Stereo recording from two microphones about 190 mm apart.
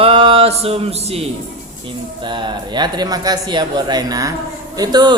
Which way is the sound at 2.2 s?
25° right (ahead or behind).